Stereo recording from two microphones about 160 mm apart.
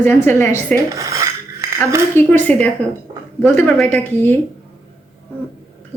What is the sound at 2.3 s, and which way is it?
A woman's voice, 10° left (ahead or behind).